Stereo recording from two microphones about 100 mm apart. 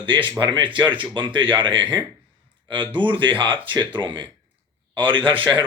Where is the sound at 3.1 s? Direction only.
55° right (ahead or behind).